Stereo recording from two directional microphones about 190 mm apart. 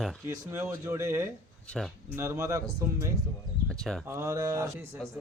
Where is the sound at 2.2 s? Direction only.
15° right (ahead or behind).